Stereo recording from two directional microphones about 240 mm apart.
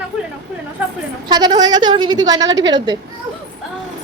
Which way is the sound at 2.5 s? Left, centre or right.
Right.